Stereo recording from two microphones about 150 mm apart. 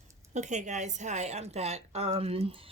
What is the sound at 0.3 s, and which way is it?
A woman's voice, 55° right (ahead or behind).